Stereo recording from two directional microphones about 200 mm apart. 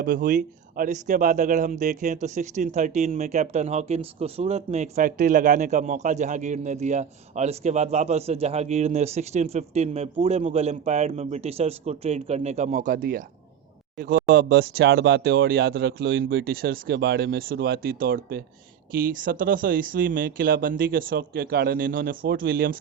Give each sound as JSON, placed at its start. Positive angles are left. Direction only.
{"t": 0.0, "sound": "speech", "side_deg": -45}